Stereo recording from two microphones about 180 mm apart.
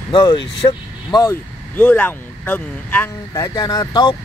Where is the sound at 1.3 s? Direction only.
10° left (ahead or behind).